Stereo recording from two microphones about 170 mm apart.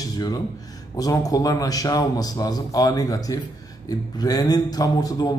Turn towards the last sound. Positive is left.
turn(degrees=20)  # may be behind; listen again after turning